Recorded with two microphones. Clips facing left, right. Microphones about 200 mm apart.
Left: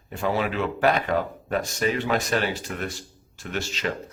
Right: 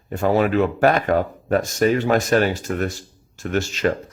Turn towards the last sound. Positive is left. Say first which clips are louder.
# right 8 dB
turn(degrees=-50)  # may be behind; listen again after turning